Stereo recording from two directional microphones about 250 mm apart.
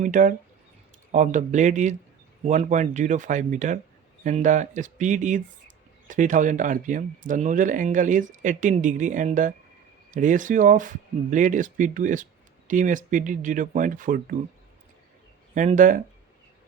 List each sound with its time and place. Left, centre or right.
0.0 s speech: right
15.5 s speech: right